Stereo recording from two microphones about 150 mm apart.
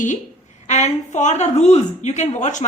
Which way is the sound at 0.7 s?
50° left (ahead or behind).